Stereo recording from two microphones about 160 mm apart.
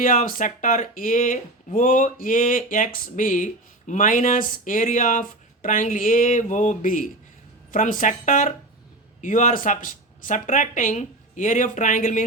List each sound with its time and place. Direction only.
0.0 s speech: 55° left (ahead or behind)